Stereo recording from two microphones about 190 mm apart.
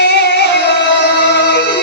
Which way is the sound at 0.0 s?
60° left (ahead or behind).